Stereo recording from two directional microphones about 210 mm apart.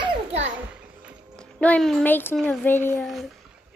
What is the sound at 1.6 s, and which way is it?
A child's voice, 5° left (ahead or behind).